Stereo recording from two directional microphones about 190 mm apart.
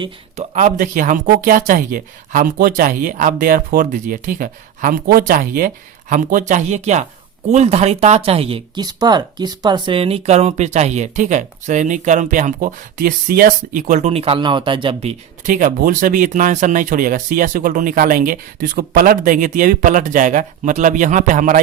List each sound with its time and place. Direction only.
0.0 s speech: 35° right (ahead or behind)
15.4 s speech: 45° right (ahead or behind)